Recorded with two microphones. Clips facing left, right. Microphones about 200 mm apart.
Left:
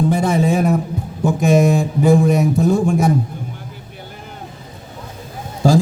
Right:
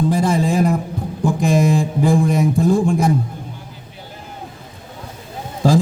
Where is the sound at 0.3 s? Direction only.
Centre (ahead or behind).